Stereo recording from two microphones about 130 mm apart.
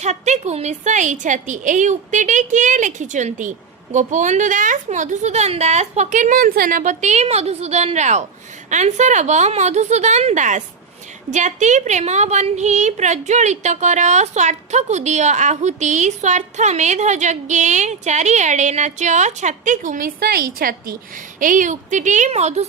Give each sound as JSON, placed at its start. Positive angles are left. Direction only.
{"t": 0.0, "sound": "a woman's voice", "side_deg": -60}
{"t": 21.3, "sound": "a woman's voice", "side_deg": -90}